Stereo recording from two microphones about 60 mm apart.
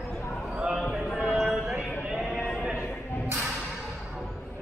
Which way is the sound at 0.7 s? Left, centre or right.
Centre.